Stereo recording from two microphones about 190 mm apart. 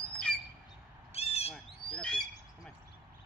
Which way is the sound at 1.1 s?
30° left (ahead or behind).